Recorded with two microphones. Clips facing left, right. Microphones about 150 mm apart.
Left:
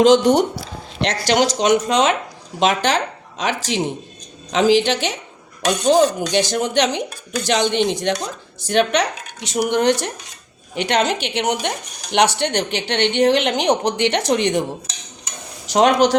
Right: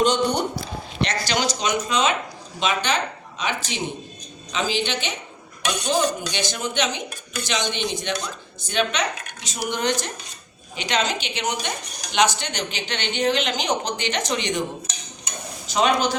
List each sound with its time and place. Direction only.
0.0 s a woman's voice: 90° left
1.0 s a woman's voice: 70° left (ahead or behind); by 5.1 s 90° left
5.8 s a woman's voice: 65° left (ahead or behind)
15.6 s speech: 75° left (ahead or behind)